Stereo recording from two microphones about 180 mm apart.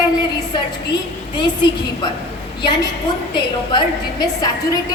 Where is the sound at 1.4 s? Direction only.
25° left (ahead or behind).